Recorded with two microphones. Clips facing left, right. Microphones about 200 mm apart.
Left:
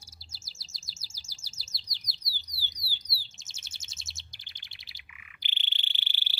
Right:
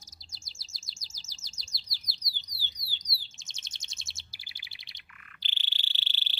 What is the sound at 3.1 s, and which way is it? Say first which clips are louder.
Chirp: left 1 dB; 5° left (ahead or behind).